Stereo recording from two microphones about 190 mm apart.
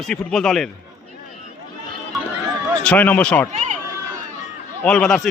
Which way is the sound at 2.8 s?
5° left (ahead or behind).